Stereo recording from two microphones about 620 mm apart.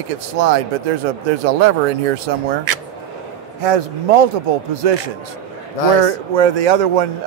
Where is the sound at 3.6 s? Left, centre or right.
Right.